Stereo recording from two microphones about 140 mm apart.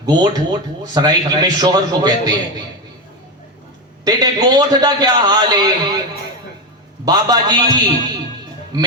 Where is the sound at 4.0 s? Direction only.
30° right (ahead or behind).